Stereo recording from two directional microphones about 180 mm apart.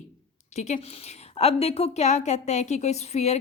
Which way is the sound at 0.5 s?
40° left (ahead or behind).